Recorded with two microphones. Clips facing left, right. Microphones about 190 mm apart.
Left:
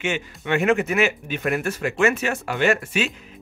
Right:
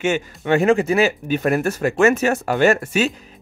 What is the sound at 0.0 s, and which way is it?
Speech, 40° right (ahead or behind).